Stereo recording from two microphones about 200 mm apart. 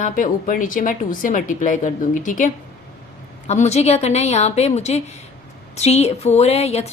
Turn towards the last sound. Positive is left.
turn(degrees=30)  # may be behind; listen again after turning